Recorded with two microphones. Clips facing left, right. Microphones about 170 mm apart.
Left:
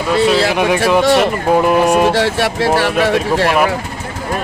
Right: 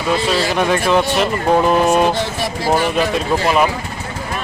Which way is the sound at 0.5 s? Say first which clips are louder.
Left 2 dB; 15° left (ahead or behind).